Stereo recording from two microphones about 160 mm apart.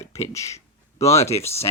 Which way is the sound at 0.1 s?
20° left (ahead or behind).